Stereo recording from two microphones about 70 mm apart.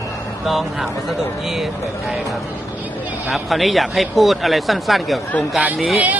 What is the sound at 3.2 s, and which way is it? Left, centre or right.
Speech, centre.